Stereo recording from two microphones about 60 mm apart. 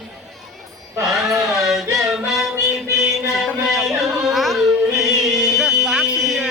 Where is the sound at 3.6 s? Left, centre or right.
Centre.